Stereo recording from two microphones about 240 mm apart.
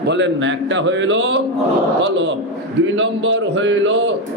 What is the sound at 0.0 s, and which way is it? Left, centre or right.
A man's voice, right.